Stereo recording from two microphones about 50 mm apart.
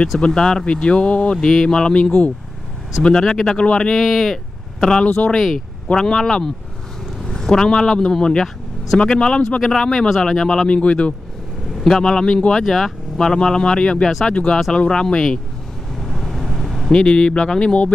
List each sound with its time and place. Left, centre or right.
0.3 s speech: centre
3.9 s speech: centre
4.7 s speech: centre
5.0 s speech: left
5.9 s speech: centre
10.0 s speech: centre
10.7 s speech: left
11.8 s speech: centre
16.0 s vehicle: centre
16.9 s speech: centre